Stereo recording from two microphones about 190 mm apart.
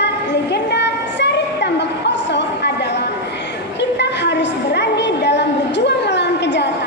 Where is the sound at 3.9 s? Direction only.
65° left (ahead or behind).